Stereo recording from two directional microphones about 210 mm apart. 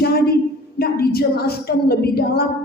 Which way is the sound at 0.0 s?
50° left (ahead or behind).